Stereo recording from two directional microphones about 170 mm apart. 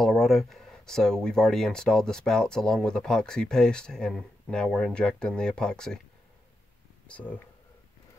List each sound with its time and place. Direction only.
0.0 s speech: centre (ahead or behind)
7.1 s speech: 10° left (ahead or behind)